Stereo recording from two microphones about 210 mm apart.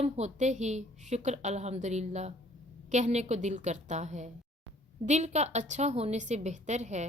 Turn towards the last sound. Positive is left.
turn(degrees=-35)  # may be behind; listen again after turning